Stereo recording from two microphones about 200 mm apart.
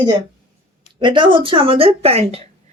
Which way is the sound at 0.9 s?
25° right (ahead or behind).